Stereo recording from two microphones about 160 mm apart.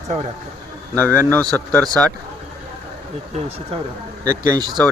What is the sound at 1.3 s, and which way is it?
Speech, 10° left (ahead or behind).